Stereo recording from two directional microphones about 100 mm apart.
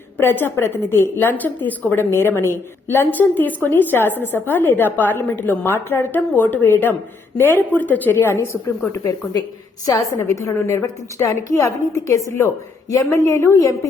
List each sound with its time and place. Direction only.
0.2 s a woman's voice: 20° left (ahead or behind)
9.8 s a woman's voice: 35° left (ahead or behind)